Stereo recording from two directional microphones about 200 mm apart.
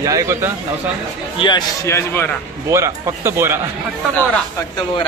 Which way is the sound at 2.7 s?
15° right (ahead or behind).